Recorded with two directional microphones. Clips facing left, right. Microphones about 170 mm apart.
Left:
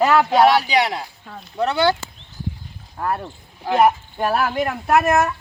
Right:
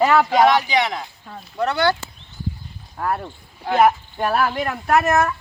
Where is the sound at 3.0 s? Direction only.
Centre (ahead or behind).